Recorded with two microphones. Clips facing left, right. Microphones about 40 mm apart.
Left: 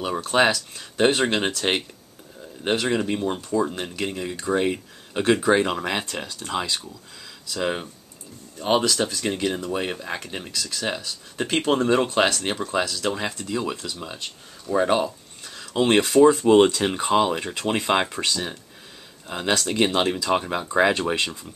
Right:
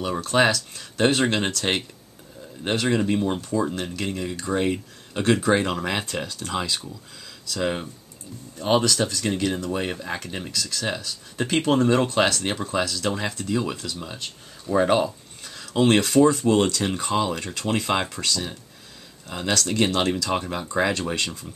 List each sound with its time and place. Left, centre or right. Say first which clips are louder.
0.1 s speech: even; centre
16.5 s speech: left 5 dB; left